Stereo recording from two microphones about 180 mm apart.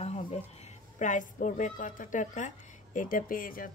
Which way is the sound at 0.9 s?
45° left (ahead or behind).